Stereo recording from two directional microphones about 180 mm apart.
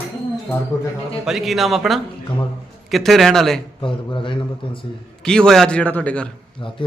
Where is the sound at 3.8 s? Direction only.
25° left (ahead or behind).